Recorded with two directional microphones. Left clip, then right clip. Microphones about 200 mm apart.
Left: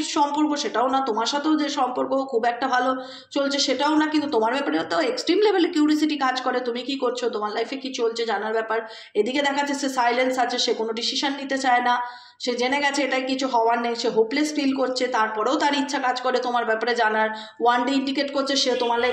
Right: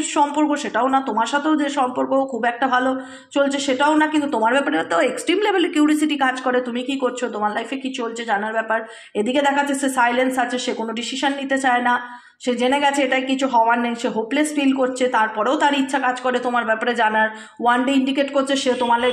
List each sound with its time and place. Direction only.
0.1 s a woman's voice: 25° right (ahead or behind)